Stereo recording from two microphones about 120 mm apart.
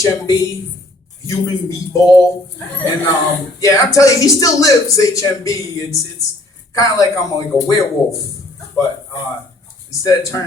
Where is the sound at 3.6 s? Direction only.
25° left (ahead or behind).